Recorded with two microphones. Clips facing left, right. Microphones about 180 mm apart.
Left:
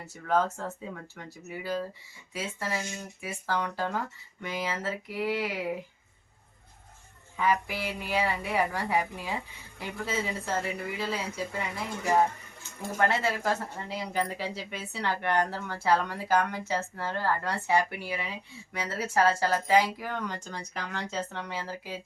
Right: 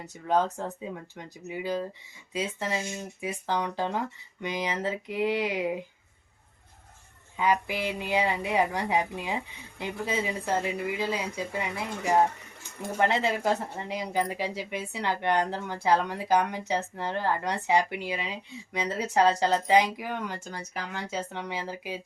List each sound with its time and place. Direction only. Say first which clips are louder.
0.0 s speech: right 1 dB; 20° right (ahead or behind)
7.3 s speech: right 2 dB; 20° right (ahead or behind)